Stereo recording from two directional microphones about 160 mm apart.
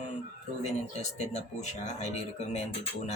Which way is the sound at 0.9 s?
45° left (ahead or behind).